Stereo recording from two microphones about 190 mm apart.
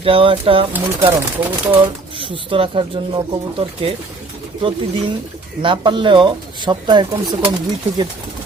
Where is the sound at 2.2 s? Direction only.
30° right (ahead or behind).